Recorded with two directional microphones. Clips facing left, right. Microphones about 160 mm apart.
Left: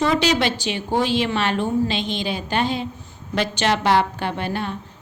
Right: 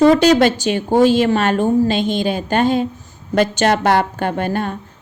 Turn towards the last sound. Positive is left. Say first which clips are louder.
# right 5 dB
turn(degrees=-50)  # may be behind; listen again after turning